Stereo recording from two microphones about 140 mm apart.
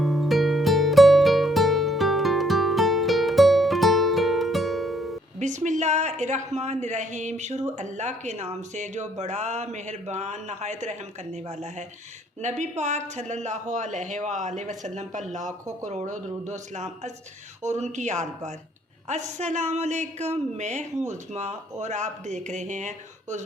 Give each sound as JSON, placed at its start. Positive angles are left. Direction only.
{"t": 0.0, "sound": "music", "side_deg": 0}
{"t": 5.4, "sound": "a woman's voice", "side_deg": -60}